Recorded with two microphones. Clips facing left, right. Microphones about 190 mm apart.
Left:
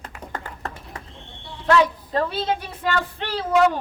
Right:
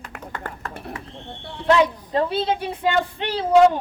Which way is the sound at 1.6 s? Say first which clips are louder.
Right 1 dB; 15° right (ahead or behind).